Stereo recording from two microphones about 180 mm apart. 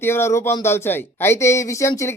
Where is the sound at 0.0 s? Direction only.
15° left (ahead or behind).